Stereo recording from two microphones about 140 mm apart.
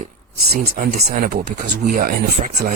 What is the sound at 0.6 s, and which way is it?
Speech, 90° right.